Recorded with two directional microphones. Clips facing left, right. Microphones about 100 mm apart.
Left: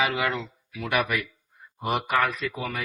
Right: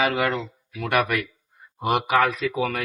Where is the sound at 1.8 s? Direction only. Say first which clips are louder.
Right 4 dB; 85° right.